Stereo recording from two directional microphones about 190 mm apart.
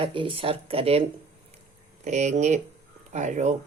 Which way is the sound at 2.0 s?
40° right (ahead or behind).